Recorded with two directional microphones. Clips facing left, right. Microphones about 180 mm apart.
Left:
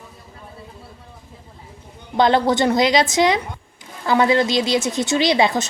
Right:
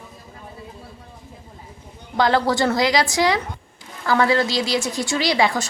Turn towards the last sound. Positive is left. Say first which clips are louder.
# left 3 dB
turn(degrees=20)  # may be behind; listen again after turning